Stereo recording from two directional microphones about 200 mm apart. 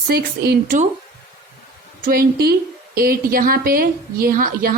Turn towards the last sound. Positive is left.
turn(degrees=-45)  # may be behind; listen again after turning